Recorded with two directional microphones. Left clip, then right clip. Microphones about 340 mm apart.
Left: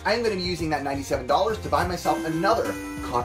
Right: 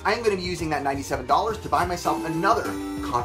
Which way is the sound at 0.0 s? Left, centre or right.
Centre.